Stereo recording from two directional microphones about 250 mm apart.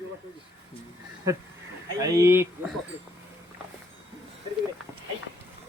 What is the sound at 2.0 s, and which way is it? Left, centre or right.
Speech, centre.